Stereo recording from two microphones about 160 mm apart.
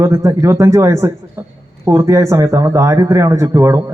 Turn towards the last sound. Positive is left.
turn(degrees=-15)  # may be behind; listen again after turning